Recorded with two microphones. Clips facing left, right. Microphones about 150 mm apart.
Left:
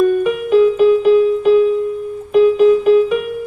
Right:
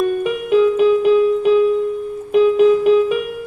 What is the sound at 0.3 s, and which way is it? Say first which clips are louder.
Music: left 2 dB; 40° left (ahead or behind).